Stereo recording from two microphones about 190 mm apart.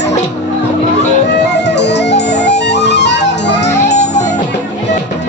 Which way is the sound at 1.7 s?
65° left (ahead or behind).